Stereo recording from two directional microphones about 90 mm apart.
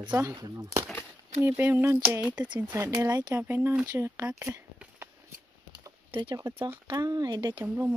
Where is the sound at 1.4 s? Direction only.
25° right (ahead or behind).